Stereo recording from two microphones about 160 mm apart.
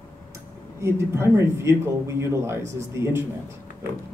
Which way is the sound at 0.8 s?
15° right (ahead or behind).